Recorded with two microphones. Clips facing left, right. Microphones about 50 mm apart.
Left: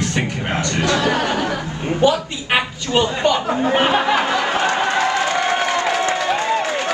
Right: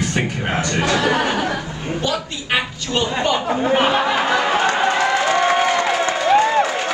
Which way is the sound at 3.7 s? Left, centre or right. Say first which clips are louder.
Even; centre.